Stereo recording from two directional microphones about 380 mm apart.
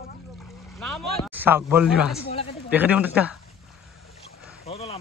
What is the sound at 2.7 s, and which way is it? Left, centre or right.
Speech, centre.